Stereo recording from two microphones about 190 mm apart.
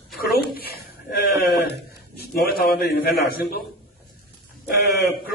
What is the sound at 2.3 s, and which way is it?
A man's voice, 55° left (ahead or behind).